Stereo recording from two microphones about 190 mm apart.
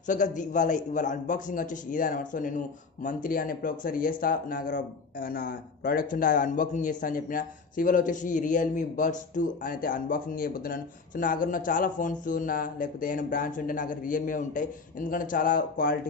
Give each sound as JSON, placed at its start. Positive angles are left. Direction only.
{"t": 0.0, "sound": "a man's voice", "side_deg": 40}